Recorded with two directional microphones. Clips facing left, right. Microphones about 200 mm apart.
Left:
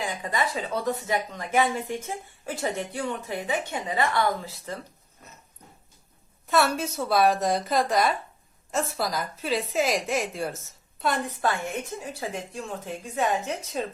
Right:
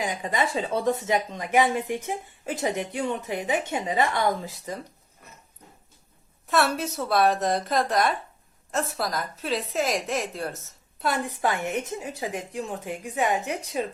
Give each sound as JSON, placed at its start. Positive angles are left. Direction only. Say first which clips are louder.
{"t": 0.0, "sound": "a woman's voice", "louder": "right 2 dB", "side_deg": -20}
{"t": 6.5, "sound": "a woman's voice", "louder": "even", "side_deg": 0}